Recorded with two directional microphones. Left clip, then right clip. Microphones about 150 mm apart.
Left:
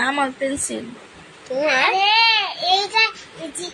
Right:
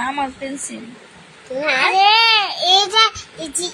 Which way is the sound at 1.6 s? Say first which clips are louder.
Right 1 dB; 5° left (ahead or behind).